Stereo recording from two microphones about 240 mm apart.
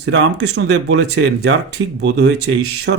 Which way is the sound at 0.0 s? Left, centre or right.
Right.